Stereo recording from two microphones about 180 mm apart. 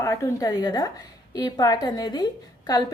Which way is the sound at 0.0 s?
15° left (ahead or behind).